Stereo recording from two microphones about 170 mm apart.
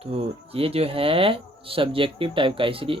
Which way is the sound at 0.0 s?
35° right (ahead or behind).